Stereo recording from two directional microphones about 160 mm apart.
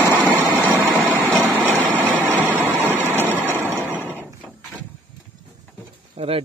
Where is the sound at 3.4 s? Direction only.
10° left (ahead or behind).